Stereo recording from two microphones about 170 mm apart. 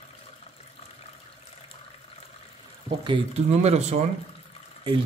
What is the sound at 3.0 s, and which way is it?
Speech, 35° right (ahead or behind).